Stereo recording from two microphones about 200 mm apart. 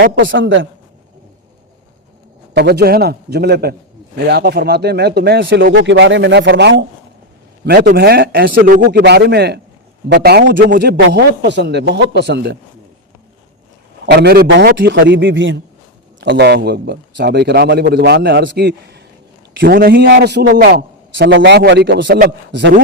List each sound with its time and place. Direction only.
0.2 s a man's voice: 65° right (ahead or behind)
2.6 s a man's voice: 55° right (ahead or behind)
7.8 s a man's voice: 45° right (ahead or behind)
14.1 s a man's voice: 55° right (ahead or behind)
22.0 s speech: 50° right (ahead or behind)